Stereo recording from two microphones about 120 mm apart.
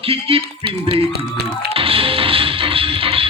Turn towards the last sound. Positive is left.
turn(degrees=-50)  # may be behind; listen again after turning